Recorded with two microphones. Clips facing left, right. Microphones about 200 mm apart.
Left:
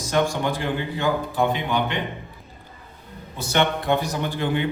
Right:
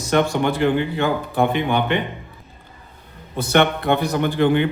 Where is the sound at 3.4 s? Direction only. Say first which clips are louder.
Right 5 dB; 60° right (ahead or behind).